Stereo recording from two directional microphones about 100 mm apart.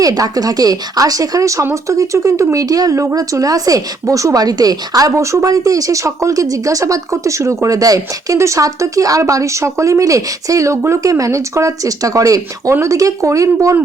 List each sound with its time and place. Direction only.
0.0 s speech: 40° right (ahead or behind)